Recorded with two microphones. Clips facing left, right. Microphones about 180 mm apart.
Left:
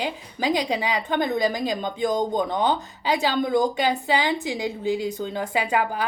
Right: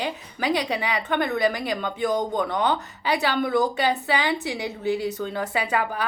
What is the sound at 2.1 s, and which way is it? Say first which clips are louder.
Speech: left 1 dB; 30° left (ahead or behind).